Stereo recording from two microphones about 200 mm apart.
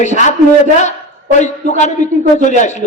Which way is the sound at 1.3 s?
35° left (ahead or behind).